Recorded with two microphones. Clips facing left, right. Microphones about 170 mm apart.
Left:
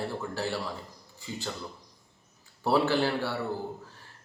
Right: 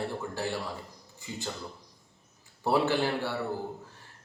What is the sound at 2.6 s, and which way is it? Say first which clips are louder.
Speech: left 1 dB; 20° right (ahead or behind).